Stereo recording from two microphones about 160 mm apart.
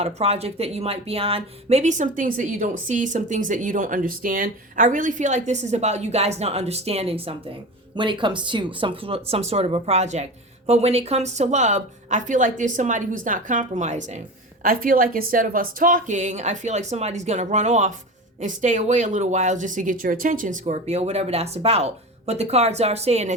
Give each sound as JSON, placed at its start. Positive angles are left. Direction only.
{"t": 0.0, "sound": "speech", "side_deg": -40}
{"t": 14.6, "sound": "speech", "side_deg": -60}